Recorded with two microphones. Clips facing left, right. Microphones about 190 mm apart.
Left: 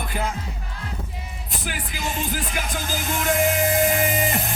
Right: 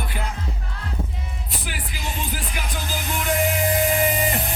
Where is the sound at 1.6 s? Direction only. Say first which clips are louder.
Left 4 dB; 45° left (ahead or behind).